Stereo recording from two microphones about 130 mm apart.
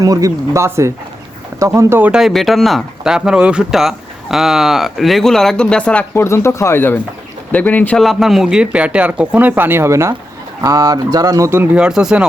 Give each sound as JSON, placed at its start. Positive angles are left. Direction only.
{"t": 0.0, "sound": "speech", "side_deg": -25}
{"t": 2.2, "sound": "speech", "side_deg": 0}
{"t": 6.2, "sound": "speech", "side_deg": 20}
{"t": 8.0, "sound": "speech", "side_deg": 0}